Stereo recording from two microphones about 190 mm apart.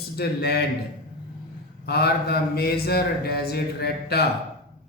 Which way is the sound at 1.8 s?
55° left (ahead or behind).